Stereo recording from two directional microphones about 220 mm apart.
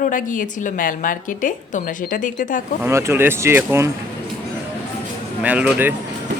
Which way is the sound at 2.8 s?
10° right (ahead or behind).